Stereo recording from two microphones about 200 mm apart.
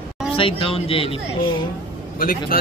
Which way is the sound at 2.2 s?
45° left (ahead or behind).